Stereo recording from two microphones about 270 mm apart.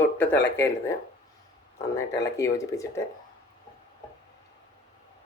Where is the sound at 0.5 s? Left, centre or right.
Centre.